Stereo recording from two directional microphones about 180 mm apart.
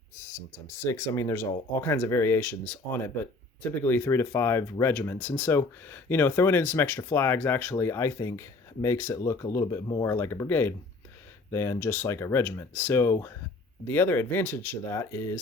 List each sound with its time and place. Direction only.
0.9 s speech: 15° left (ahead or behind)